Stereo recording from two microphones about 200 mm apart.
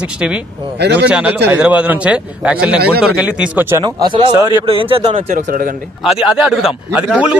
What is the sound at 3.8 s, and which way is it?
Speech, 20° right (ahead or behind).